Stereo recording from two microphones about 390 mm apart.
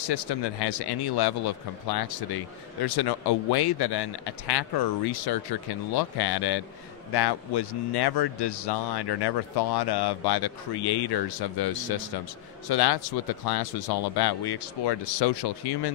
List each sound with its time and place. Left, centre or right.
0.0 s speech: left